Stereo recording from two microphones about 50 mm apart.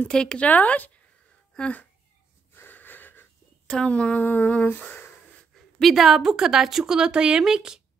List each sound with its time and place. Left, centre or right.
0.1 s speech: centre
0.5 s speech: left
2.5 s wheeze: left
3.6 s speech: centre
4.2 s speech: left
5.8 s a woman's voice: centre